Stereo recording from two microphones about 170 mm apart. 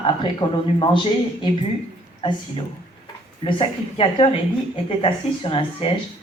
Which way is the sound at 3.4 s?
30° left (ahead or behind).